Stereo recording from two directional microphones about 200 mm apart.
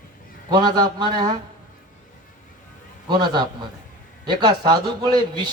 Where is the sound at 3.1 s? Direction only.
20° right (ahead or behind).